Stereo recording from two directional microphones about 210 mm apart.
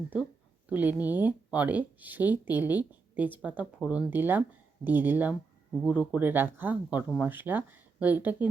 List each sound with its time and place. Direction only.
0.7 s speech: 10° right (ahead or behind)